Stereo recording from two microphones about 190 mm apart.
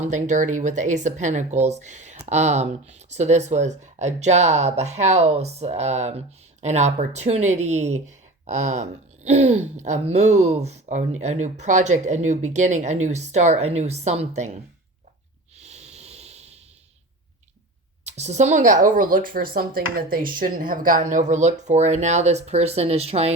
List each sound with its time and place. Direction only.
0.0 s speech: 40° right (ahead or behind)
15.5 s a sound: 35° right (ahead or behind)
18.0 s speech: 35° right (ahead or behind)